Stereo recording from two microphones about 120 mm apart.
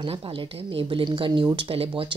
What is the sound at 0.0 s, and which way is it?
A woman's voice, 50° right (ahead or behind).